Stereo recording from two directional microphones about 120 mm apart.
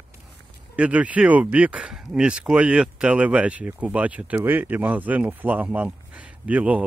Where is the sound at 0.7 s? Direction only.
10° right (ahead or behind).